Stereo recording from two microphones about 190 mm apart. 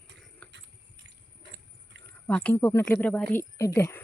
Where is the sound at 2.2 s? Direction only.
10° left (ahead or behind).